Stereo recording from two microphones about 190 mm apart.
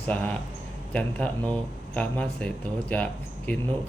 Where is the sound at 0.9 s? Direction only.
5° left (ahead or behind).